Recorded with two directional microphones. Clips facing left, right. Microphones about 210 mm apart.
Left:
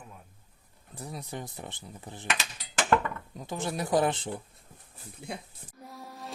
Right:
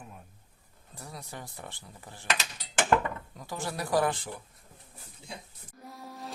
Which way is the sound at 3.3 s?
20° left (ahead or behind).